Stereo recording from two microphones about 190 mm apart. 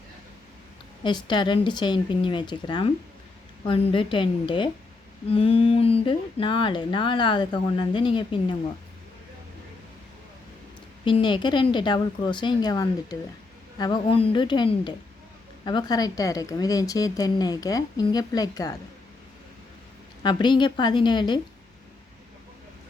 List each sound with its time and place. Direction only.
1.0 s speech: 25° left (ahead or behind)
11.0 s speech: 25° left (ahead or behind)
20.2 s speech: 25° left (ahead or behind)